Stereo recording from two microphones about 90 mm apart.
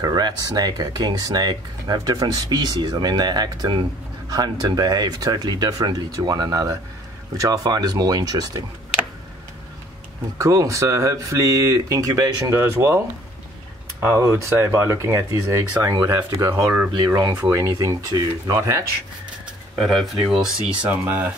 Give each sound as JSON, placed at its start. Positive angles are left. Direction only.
{"t": 0.0, "sound": "speech", "side_deg": -45}
{"t": 10.4, "sound": "speech", "side_deg": -40}
{"t": 14.0, "sound": "speech", "side_deg": -30}
{"t": 15.8, "sound": "speech", "side_deg": -40}
{"t": 19.7, "sound": "speech", "side_deg": 0}
{"t": 20.9, "sound": "speech", "side_deg": -20}